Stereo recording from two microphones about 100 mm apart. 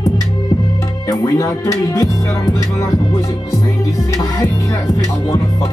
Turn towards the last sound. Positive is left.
turn(degrees=30)  # may be behind; listen again after turning